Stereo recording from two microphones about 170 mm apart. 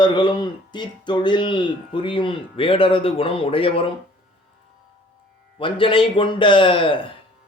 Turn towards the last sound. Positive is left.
turn(degrees=30)  # may be behind; listen again after turning